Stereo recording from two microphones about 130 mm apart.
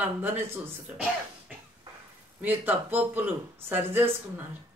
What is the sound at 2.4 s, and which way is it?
Speech, 15° right (ahead or behind).